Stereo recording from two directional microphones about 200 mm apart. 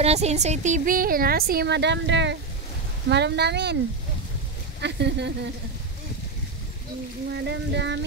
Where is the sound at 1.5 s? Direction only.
55° right (ahead or behind).